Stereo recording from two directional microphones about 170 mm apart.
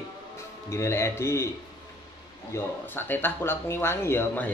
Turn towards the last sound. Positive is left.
turn(degrees=10)  # may be behind; listen again after turning